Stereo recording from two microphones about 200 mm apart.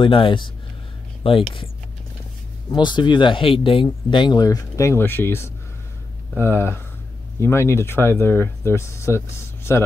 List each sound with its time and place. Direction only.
0.0 s speech: 25° left (ahead or behind)
2.7 s speech: 20° left (ahead or behind)